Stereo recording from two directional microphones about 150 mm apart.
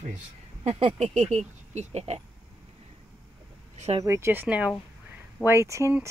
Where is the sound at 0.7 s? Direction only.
40° right (ahead or behind).